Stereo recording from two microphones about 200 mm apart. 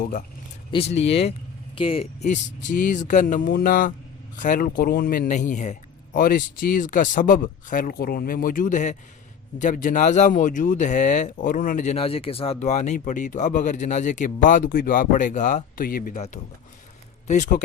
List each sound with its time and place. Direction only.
0.0 s speech: 40° left (ahead or behind)
0.7 s speech: 30° left (ahead or behind)